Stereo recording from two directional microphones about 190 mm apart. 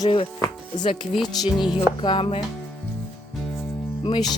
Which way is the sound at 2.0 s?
25° left (ahead or behind).